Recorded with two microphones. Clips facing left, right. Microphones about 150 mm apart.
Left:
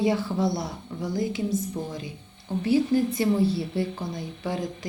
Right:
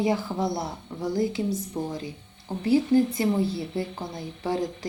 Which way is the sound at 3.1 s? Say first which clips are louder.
Left 2 dB; 25° right (ahead or behind).